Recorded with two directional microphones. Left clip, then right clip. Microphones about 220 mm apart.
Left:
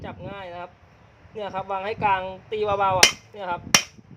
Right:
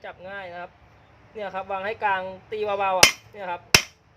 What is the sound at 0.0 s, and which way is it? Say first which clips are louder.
Speech: even; 25° left (ahead or behind).